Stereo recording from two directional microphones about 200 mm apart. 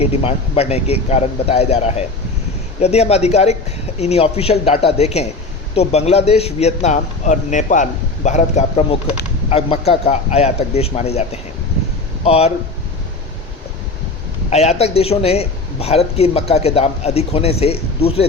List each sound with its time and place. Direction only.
0.0 s a man's voice: 30° left (ahead or behind)
14.5 s a man's voice: 30° left (ahead or behind)